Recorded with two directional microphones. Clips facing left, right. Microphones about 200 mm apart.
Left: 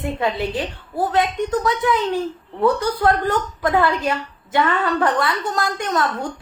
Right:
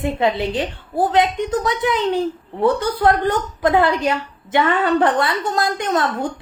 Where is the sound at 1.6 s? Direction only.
20° right (ahead or behind).